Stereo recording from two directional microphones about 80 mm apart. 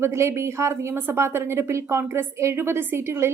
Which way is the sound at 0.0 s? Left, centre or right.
Right.